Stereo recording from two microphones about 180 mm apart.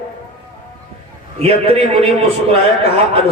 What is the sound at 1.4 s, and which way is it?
Speech, 35° right (ahead or behind).